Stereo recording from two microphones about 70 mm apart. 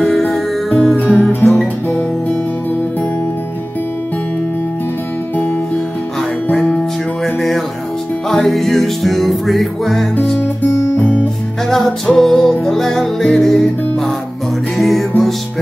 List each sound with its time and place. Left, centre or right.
0.0 s music: centre
6.5 s music: centre
10.4 s guitar: left
11.7 s music: centre